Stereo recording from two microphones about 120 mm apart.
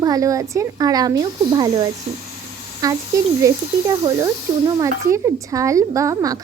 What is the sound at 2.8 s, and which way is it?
Speech, 30° right (ahead or behind).